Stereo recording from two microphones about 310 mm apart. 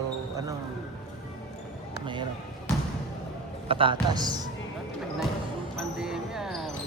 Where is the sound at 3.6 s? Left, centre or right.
Centre.